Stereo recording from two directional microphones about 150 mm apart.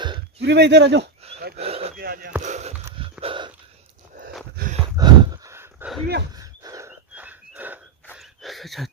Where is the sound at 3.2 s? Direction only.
35° right (ahead or behind).